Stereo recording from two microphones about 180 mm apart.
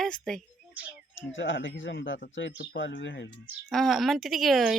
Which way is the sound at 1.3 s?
90° left.